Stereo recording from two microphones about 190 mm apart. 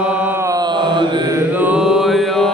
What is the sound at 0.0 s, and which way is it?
Mantra, 5° right (ahead or behind).